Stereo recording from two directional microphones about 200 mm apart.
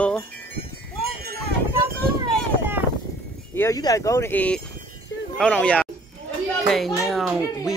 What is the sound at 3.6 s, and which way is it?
Speech, 15° left (ahead or behind).